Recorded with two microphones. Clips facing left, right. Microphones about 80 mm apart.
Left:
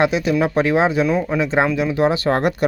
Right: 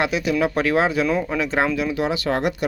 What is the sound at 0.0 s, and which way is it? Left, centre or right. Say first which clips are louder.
Speech: left 3 dB; left.